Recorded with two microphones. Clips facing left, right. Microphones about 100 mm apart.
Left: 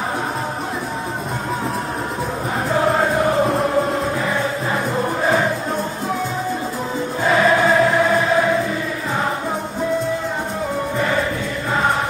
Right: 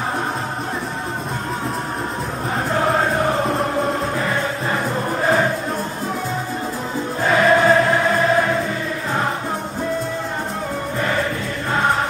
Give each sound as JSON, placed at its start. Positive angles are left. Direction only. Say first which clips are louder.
{"t": 2.7, "sound": "music", "louder": "left 2 dB", "side_deg": 0}
{"t": 7.2, "sound": "choir", "louder": "right 1 dB", "side_deg": 0}